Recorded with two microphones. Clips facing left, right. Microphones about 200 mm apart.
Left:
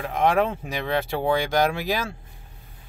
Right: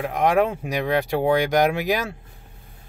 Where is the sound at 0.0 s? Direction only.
15° right (ahead or behind).